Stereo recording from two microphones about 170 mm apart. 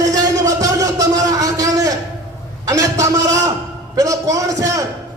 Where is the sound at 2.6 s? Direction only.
20° right (ahead or behind).